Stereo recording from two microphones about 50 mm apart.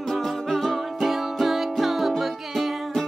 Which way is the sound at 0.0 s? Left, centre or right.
Centre.